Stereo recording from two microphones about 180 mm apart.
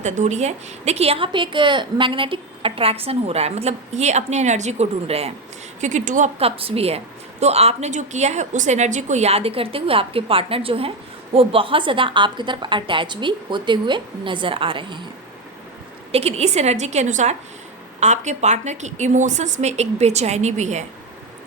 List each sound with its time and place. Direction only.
0.0 s a woman's voice: 40° right (ahead or behind)
16.1 s a woman's voice: 35° right (ahead or behind)